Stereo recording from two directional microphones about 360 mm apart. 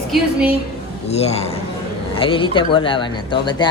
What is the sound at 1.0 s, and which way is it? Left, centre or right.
Speech, centre.